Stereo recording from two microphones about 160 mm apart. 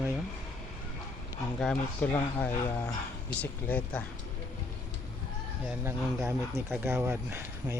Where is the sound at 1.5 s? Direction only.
5° left (ahead or behind).